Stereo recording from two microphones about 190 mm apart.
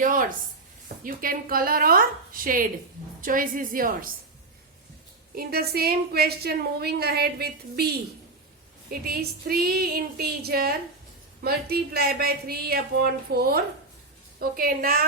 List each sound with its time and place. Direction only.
0.0 s a woman's voice: 45° right (ahead or behind)
5.3 s a woman's voice: 55° right (ahead or behind)